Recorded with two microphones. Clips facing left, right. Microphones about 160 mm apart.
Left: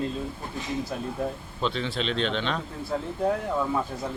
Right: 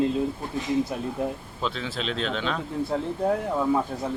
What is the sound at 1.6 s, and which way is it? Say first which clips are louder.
Speech: left 2 dB; 5° right (ahead or behind).